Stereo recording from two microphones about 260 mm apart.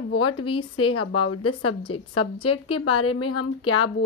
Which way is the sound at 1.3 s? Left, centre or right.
Left.